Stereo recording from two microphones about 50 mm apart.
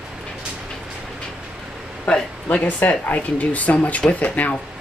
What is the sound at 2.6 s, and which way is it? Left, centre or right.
Speech, left.